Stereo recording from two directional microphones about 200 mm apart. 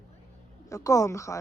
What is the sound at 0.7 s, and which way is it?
Speech, 15° left (ahead or behind).